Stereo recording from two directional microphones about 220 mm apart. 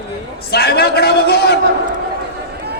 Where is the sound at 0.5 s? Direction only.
45° left (ahead or behind).